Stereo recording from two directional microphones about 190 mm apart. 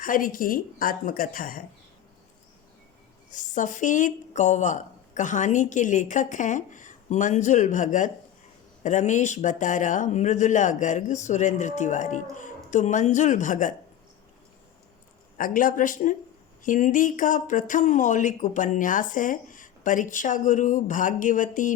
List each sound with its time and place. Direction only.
0.0 s speech: 45° left (ahead or behind)
3.3 s speech: 40° left (ahead or behind)
15.4 s speech: 45° left (ahead or behind)